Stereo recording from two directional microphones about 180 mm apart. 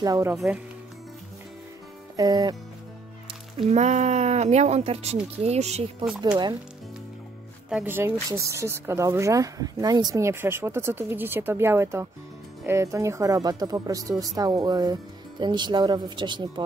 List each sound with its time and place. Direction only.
0.0 s speech: 20° right (ahead or behind)
0.3 s speech: 5° right (ahead or behind)
2.1 s speech: 20° right (ahead or behind)
3.5 s speech: 35° right (ahead or behind)
7.7 s speech: 10° right (ahead or behind)